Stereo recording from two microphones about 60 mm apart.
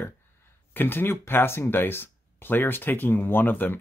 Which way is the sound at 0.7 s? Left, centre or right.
Left.